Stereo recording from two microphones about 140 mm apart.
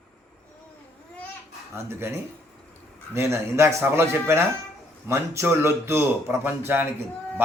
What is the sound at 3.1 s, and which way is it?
Speech, 20° right (ahead or behind).